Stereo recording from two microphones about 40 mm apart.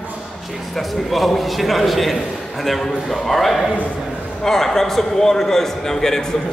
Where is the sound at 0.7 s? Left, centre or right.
Centre.